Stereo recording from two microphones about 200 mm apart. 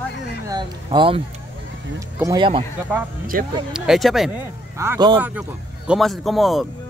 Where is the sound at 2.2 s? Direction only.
20° right (ahead or behind).